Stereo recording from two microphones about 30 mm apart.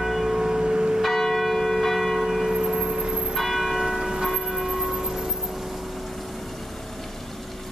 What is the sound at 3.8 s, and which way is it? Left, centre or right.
Church bell, centre.